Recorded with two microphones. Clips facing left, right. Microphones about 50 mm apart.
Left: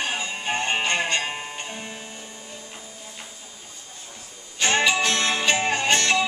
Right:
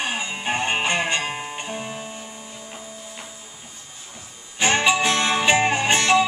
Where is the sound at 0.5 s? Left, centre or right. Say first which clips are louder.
Right 2 dB; centre.